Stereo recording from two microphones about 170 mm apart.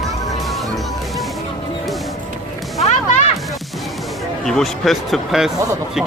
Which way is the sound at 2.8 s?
45° left (ahead or behind).